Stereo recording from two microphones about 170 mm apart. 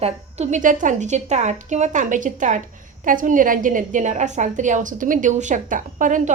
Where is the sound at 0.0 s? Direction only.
45° right (ahead or behind).